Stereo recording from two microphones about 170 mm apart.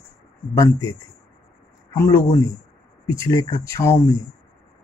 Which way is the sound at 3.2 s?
20° left (ahead or behind).